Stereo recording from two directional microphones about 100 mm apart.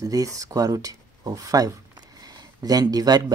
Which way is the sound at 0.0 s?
35° right (ahead or behind).